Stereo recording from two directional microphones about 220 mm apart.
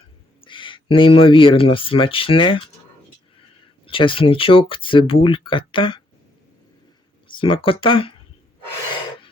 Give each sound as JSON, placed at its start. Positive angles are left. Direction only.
{"t": 0.4, "sound": "speech", "side_deg": 20}
{"t": 3.8, "sound": "speech", "side_deg": 25}
{"t": 7.3, "sound": "speech", "side_deg": 25}